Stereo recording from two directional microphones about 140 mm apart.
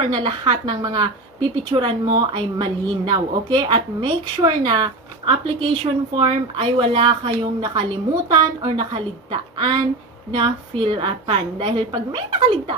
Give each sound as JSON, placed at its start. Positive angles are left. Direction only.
{"t": 0.1, "sound": "a woman's voice", "side_deg": -35}